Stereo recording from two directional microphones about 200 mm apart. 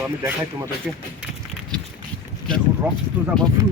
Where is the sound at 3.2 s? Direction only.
10° right (ahead or behind).